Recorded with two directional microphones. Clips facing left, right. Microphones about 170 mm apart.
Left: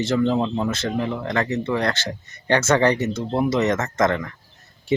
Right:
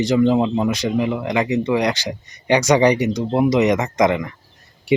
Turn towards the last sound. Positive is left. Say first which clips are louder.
# right 4 dB
turn(degrees=-15)  # may be behind; listen again after turning